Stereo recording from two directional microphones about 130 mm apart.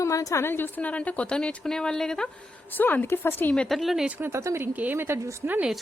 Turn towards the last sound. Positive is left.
turn(degrees=-5)  # may be behind; listen again after turning